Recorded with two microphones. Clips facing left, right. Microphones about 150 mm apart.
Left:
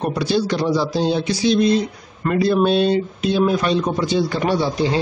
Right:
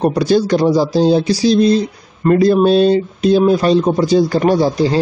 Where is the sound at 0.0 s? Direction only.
45° right (ahead or behind).